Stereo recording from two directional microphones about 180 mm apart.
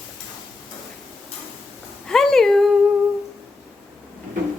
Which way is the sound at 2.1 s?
5° left (ahead or behind).